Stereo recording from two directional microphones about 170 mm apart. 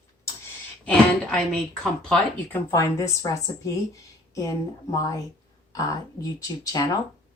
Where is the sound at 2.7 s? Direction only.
15° left (ahead or behind).